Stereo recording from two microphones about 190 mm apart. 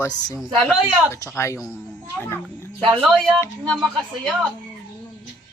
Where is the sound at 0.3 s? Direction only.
5° right (ahead or behind).